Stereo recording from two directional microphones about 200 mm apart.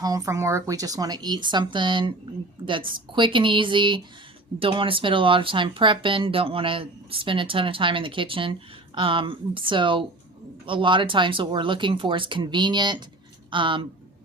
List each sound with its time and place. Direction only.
0.0 s speech: 15° right (ahead or behind)